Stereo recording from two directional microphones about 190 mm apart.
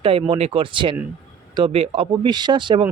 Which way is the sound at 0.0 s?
30° right (ahead or behind).